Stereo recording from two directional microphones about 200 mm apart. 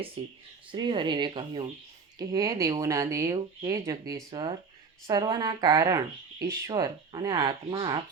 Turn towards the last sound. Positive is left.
turn(degrees=-25)  # may be behind; listen again after turning